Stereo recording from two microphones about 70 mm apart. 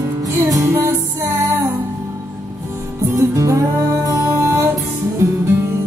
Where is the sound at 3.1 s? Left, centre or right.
Right.